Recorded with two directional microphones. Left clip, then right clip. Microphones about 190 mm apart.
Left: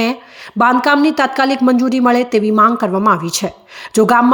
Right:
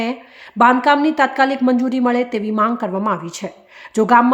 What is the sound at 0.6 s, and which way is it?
A woman's voice, 15° left (ahead or behind).